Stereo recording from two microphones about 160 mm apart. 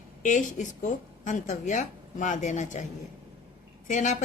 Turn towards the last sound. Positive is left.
turn(degrees=50)  # may be behind; listen again after turning